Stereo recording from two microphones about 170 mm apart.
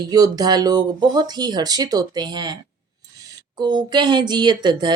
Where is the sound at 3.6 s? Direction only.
25° right (ahead or behind).